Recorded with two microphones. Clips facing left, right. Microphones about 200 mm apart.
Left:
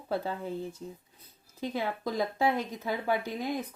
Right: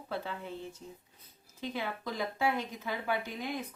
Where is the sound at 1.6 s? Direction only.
40° left (ahead or behind).